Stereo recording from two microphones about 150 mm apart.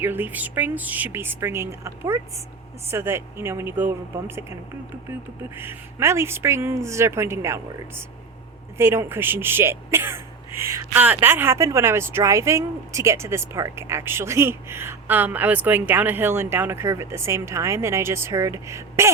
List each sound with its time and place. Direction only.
0.0 s speech: 15° right (ahead or behind)
5.4 s speech: 15° right (ahead or behind)